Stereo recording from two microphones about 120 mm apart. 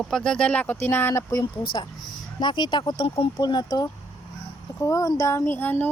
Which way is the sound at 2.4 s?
40° left (ahead or behind).